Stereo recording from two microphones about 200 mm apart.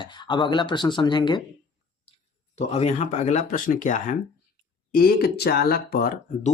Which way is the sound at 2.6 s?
35° left (ahead or behind).